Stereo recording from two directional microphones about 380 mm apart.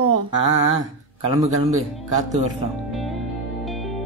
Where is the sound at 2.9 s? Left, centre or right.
Centre.